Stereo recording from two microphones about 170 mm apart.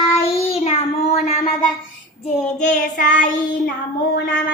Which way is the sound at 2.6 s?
45° left (ahead or behind).